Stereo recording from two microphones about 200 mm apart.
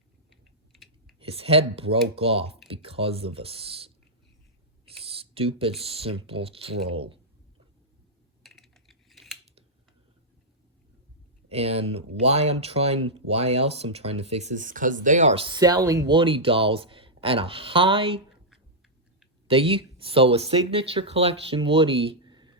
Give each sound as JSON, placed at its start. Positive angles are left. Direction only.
{"t": 0.7, "sound": "typing", "side_deg": 0}
{"t": 1.2, "sound": "speech", "side_deg": -30}
{"t": 4.9, "sound": "a sound", "side_deg": -30}
{"t": 5.8, "sound": "speech", "side_deg": -30}
{"t": 8.4, "sound": "computer keyboard", "side_deg": 0}
{"t": 11.4, "sound": "speech", "side_deg": -30}
{"t": 19.5, "sound": "speech", "side_deg": -25}